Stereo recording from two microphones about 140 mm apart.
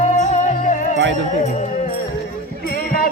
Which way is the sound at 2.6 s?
90° left.